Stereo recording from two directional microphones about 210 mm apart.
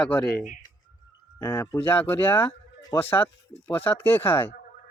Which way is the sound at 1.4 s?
10° left (ahead or behind).